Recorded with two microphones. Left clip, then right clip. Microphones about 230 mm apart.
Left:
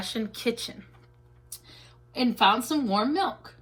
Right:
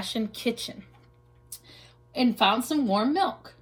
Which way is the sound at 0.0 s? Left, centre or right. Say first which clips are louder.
Even; centre.